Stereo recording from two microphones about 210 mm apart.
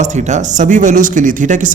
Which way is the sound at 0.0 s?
35° right (ahead or behind).